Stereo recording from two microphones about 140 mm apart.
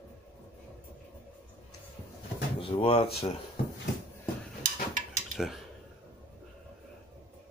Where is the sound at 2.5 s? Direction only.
40° left (ahead or behind).